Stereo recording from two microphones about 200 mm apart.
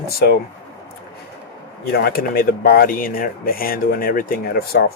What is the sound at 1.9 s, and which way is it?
Speech, 50° left (ahead or behind).